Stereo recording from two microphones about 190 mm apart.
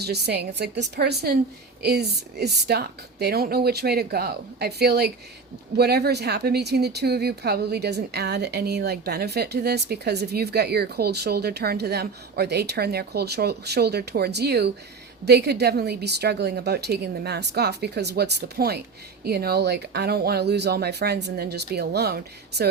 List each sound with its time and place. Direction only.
0.0 s speech: 60° right (ahead or behind)